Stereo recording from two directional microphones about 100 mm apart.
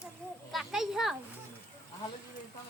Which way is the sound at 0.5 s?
5° right (ahead or behind).